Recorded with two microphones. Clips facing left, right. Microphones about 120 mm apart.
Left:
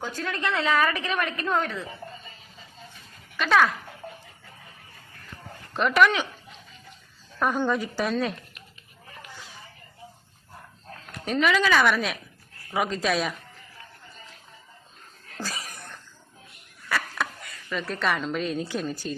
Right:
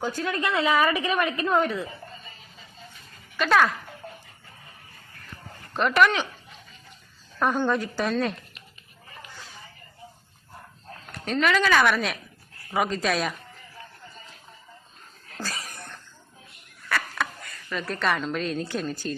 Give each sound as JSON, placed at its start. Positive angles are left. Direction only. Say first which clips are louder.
{"t": 0.0, "sound": "a woman's voice", "louder": "right 3 dB", "side_deg": -5}
{"t": 3.3, "sound": "a woman's voice", "louder": "even", "side_deg": 0}
{"t": 5.7, "sound": "a woman's voice", "louder": "even", "side_deg": 0}
{"t": 7.3, "sound": "a woman's voice", "louder": "right 1 dB", "side_deg": 0}
{"t": 11.1, "sound": "a woman's voice", "louder": "even", "side_deg": 0}
{"t": 15.4, "sound": "a sound", "louder": "even", "side_deg": 0}
{"t": 16.9, "sound": "speech", "louder": "even", "side_deg": 0}